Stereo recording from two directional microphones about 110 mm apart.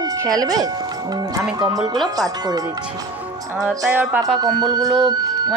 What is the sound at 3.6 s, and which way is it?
Speech, 5° right (ahead or behind).